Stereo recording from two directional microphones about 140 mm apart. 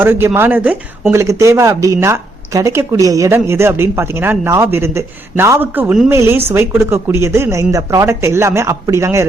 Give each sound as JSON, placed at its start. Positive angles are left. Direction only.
{"t": 0.0, "sound": "speech", "side_deg": -15}
{"t": 1.2, "sound": "speech", "side_deg": -20}